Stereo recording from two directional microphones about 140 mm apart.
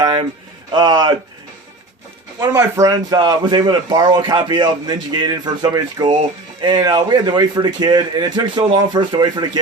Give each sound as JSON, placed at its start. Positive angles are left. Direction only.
{"t": 0.0, "sound": "a sound", "side_deg": -30}
{"t": 0.7, "sound": "a man's voice", "side_deg": -30}
{"t": 2.4, "sound": "a man's voice", "side_deg": -20}